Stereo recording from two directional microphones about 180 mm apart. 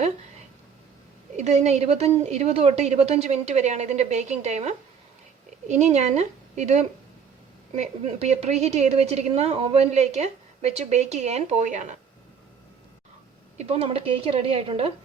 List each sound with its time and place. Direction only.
1.4 s a woman's voice: 40° right (ahead or behind)
13.6 s a woman's voice: 35° right (ahead or behind)